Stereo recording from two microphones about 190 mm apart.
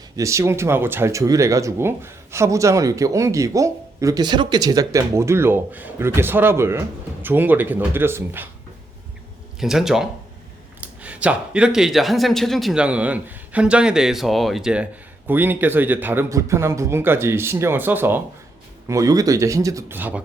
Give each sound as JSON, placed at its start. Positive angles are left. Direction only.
{"t": 0.2, "sound": "speech", "side_deg": -15}
{"t": 9.6, "sound": "speech", "side_deg": 0}